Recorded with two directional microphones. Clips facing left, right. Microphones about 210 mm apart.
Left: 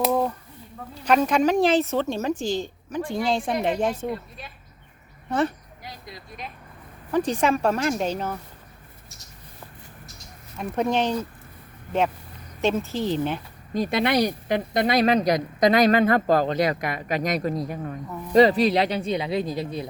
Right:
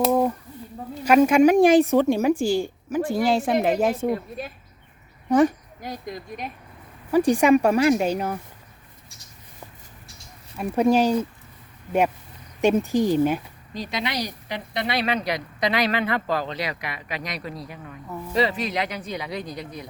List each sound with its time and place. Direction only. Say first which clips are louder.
0.1 s a sound: right 3 dB; 10° right (ahead or behind)
1.0 s a woman's voice: right 5 dB; 10° right (ahead or behind)
4.1 s speech: right 6 dB; 45° right (ahead or behind)
5.3 s a woman's voice: right 6 dB; 10° right (ahead or behind)
5.8 s speech: right 9 dB; 50° right (ahead or behind)
7.1 s a woman's voice: right 5 dB; 10° right (ahead or behind)
10.6 s a woman's voice: right 4 dB; 10° right (ahead or behind)
12.6 s a woman's voice: right 4 dB; 15° right (ahead or behind)
13.7 s speech: left 7 dB; 55° left (ahead or behind); by 19.9 s 25° left (ahead or behind)